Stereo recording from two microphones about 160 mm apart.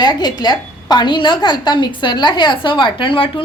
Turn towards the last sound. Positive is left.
turn(degrees=30)  # may be behind; listen again after turning